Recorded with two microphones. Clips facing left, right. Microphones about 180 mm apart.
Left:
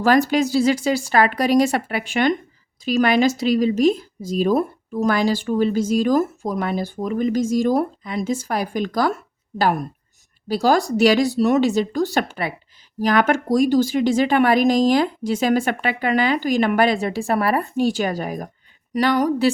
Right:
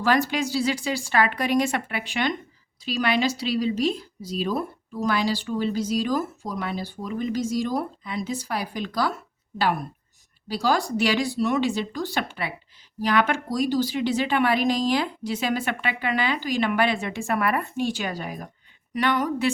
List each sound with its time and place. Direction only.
0.0 s speech: 45° left (ahead or behind)